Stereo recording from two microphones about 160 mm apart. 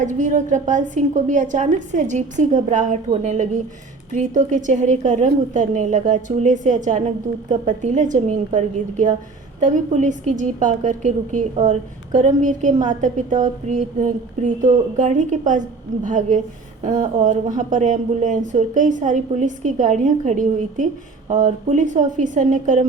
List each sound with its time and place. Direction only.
0.0 s a woman's voice: 50° right (ahead or behind)